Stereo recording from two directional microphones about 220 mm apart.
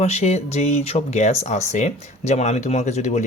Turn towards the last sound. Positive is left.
turn(degrees=30)  # may be behind; listen again after turning